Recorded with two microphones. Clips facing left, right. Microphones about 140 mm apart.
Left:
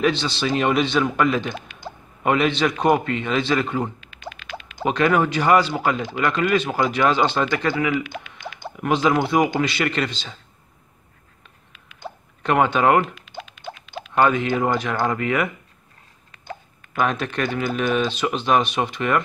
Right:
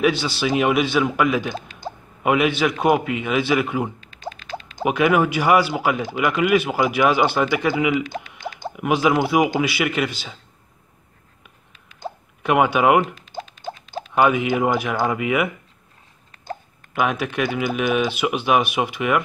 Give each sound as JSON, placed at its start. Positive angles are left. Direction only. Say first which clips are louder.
{"t": 0.0, "sound": "speech", "louder": "right 1 dB", "side_deg": -5}
{"t": 4.0, "sound": "a sound", "louder": "right 3 dB", "side_deg": -35}
{"t": 4.8, "sound": "speech", "louder": "right 1 dB", "side_deg": -10}
{"t": 8.0, "sound": "speech", "louder": "right 3 dB", "side_deg": -35}
{"t": 8.7, "sound": "speech", "louder": "right 1 dB", "side_deg": -10}
{"t": 11.7, "sound": "hiccup", "louder": "right 3 dB", "side_deg": -35}
{"t": 12.4, "sound": "speech", "louder": "right 1 dB", "side_deg": -10}
{"t": 13.1, "sound": "rodents", "louder": "right 3 dB", "side_deg": -35}
{"t": 14.1, "sound": "speech", "louder": "right 1 dB", "side_deg": -10}
{"t": 16.9, "sound": "speech", "louder": "right 1 dB", "side_deg": -10}